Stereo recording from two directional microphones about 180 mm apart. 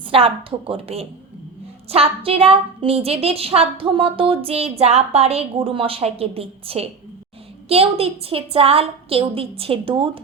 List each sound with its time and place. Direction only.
0.1 s a woman's voice: 30° right (ahead or behind)